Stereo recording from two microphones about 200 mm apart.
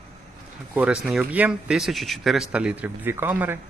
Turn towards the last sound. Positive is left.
turn(degrees=-10)  # may be behind; listen again after turning